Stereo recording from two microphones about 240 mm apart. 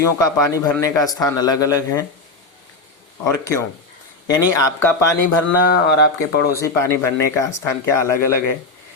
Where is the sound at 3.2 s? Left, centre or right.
Centre.